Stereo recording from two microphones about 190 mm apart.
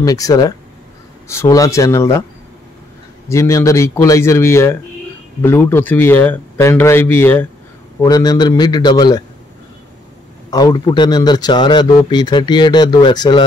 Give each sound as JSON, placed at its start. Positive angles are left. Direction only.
{"t": 0.0, "sound": "a man's voice", "side_deg": 20}
{"t": 3.3, "sound": "a man's voice", "side_deg": 15}
{"t": 10.5, "sound": "a man's voice", "side_deg": 20}